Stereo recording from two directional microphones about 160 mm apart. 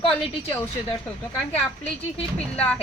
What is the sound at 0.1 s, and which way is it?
A woman's voice, 15° left (ahead or behind).